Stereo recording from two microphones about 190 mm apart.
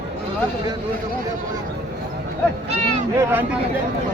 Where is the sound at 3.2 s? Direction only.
10° right (ahead or behind).